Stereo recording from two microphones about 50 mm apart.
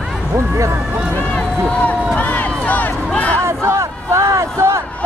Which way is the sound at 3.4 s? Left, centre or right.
Right.